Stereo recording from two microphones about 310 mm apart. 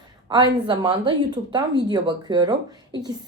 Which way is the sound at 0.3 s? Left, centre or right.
Centre.